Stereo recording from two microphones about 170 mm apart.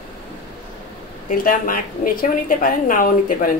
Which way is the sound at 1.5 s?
55° left (ahead or behind).